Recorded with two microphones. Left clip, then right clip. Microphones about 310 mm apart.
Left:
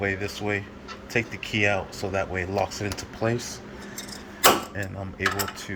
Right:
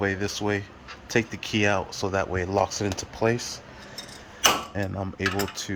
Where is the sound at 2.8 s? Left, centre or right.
Centre.